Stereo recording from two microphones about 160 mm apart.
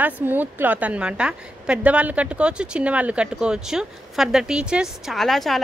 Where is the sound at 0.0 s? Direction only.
10° right (ahead or behind).